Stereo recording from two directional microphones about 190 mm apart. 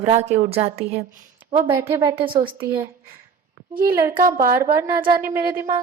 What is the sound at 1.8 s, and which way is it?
Speech, 15° right (ahead or behind).